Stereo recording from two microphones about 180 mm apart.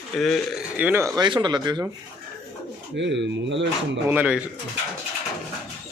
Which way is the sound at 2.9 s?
80° right.